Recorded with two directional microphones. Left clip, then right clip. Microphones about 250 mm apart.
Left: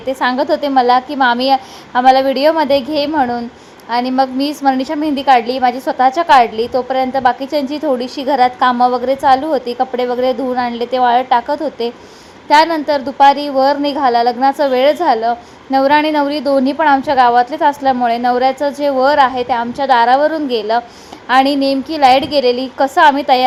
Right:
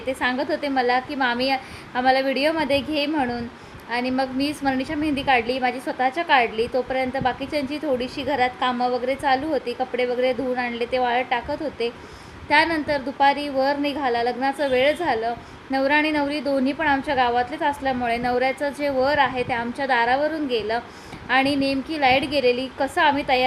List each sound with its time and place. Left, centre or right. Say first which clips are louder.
0.1 s a woman's voice: left 9 dB; centre